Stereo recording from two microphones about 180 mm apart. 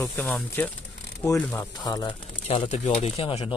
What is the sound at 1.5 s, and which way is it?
Speech, 20° left (ahead or behind).